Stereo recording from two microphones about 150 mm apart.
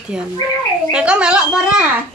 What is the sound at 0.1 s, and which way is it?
A woman's voice, 5° right (ahead or behind).